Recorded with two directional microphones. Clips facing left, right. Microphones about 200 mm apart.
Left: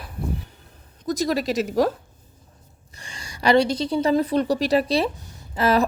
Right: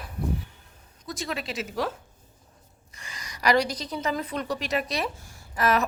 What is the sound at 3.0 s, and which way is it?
A woman's voice, 30° left (ahead or behind).